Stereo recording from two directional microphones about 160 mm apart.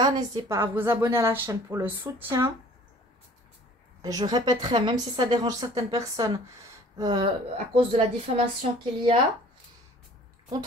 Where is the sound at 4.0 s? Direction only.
25° right (ahead or behind).